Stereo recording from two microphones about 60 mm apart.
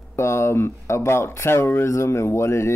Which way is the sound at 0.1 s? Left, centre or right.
Left.